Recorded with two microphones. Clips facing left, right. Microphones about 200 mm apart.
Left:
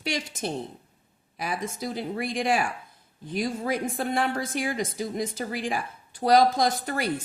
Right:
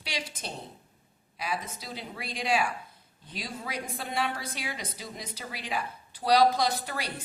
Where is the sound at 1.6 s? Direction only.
50° left (ahead or behind).